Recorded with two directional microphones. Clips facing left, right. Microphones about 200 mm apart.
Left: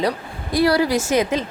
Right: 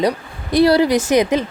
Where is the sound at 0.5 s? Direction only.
25° right (ahead or behind).